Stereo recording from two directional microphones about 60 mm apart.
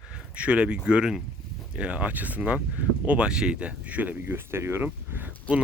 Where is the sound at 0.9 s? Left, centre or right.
Centre.